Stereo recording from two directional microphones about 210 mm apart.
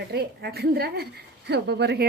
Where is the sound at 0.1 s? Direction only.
50° right (ahead or behind).